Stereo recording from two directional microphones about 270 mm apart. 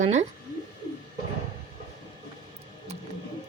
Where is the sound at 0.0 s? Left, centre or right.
Right.